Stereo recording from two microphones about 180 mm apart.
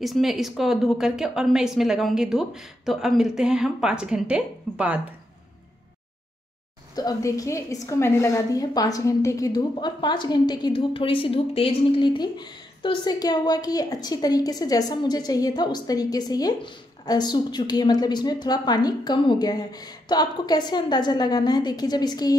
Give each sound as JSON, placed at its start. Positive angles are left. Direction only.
{"t": 0.0, "sound": "a woman's voice", "side_deg": 0}
{"t": 7.0, "sound": "a woman's voice", "side_deg": 20}